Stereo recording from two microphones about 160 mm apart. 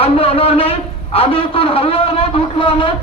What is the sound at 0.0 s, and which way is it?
A man's voice, 35° left (ahead or behind).